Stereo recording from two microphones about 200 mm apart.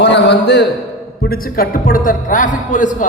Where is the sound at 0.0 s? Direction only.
60° left (ahead or behind).